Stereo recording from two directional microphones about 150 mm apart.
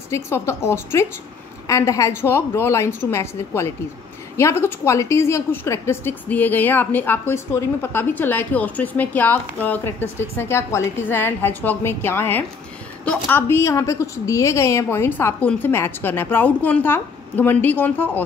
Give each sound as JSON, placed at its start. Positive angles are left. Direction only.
{"t": 0.1, "sound": "a woman's voice", "side_deg": 20}